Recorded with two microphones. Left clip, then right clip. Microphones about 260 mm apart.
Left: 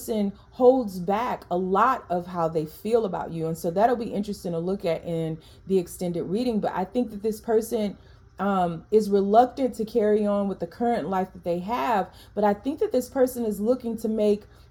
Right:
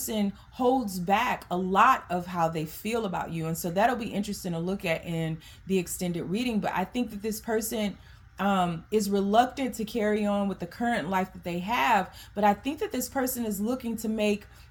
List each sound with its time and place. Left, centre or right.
0.0 s speech: right